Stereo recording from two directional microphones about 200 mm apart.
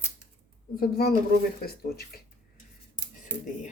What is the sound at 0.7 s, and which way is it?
Speech, 50° left (ahead or behind).